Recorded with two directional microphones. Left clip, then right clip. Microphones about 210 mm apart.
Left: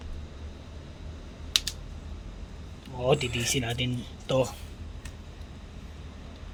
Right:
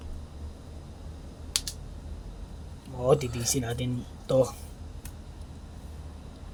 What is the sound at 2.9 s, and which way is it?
A man's voice, centre (ahead or behind).